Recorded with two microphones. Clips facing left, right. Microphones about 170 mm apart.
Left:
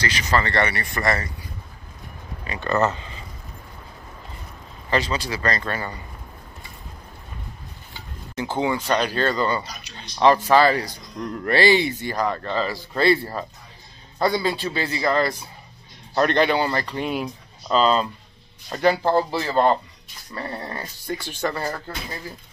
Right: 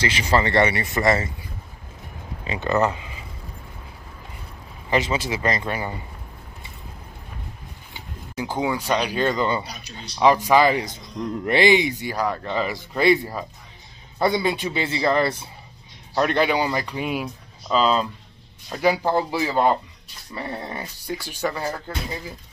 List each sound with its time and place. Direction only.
0.0 s speech: 25° right (ahead or behind)
2.4 s speech: 20° right (ahead or behind)
4.8 s speech: 20° right (ahead or behind)
8.4 s speech: 10° right (ahead or behind)
16.2 s speech: 5° right (ahead or behind)